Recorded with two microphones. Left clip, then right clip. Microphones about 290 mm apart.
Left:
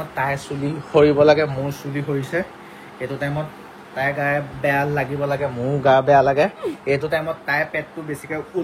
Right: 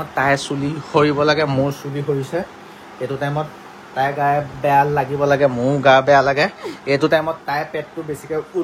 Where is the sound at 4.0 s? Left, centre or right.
Centre.